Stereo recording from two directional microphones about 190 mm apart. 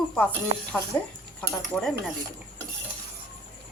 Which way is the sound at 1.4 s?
Centre (ahead or behind).